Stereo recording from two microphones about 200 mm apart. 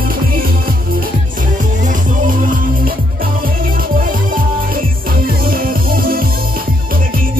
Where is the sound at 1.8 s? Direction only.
40° right (ahead or behind).